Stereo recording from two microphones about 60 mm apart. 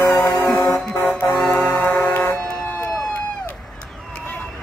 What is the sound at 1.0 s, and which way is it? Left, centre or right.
Music, centre.